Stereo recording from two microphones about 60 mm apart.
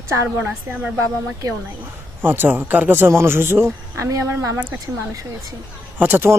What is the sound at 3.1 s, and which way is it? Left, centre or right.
A man's voice, right.